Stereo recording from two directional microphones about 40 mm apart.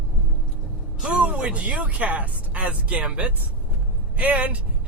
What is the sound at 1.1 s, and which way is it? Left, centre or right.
A man's voice, right.